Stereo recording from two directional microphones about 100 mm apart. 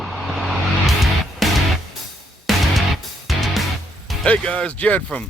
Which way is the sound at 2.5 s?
Centre (ahead or behind).